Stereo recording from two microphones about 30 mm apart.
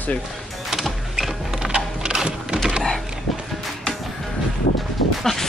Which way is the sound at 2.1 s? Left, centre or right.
Right.